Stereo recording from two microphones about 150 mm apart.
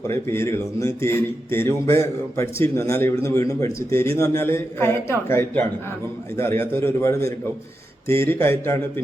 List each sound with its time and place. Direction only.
0.1 s a man's voice: 15° left (ahead or behind)